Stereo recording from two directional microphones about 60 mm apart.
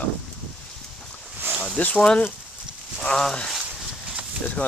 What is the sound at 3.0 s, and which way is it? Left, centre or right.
Speech, centre.